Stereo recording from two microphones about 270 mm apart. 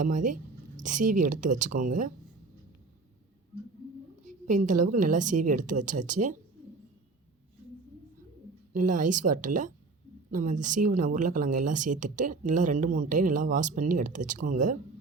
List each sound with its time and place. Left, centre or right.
0.0 s a woman's voice: right
4.4 s speech: right
8.7 s speech: right